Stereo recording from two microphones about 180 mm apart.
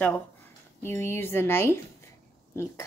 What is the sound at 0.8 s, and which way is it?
Speech, 15° left (ahead or behind).